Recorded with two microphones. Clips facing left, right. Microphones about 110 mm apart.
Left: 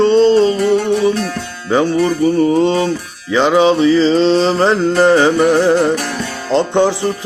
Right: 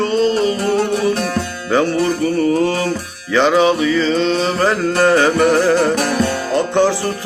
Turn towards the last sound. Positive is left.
turn(degrees=20)  # may be behind; listen again after turning